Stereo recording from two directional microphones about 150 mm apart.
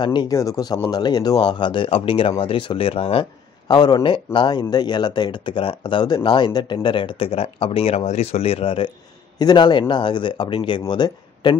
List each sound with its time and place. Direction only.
0.0 s speech: 30° left (ahead or behind)
3.6 s speech: 30° left (ahead or behind)